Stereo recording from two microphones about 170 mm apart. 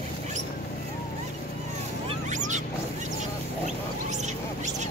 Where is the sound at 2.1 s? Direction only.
45° right (ahead or behind).